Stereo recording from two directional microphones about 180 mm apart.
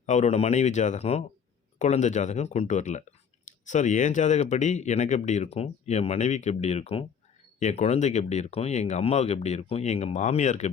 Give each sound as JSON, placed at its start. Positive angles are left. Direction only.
{"t": 0.0, "sound": "speech", "side_deg": 40}